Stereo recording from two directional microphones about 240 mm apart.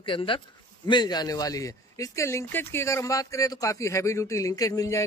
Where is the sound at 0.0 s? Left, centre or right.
Left.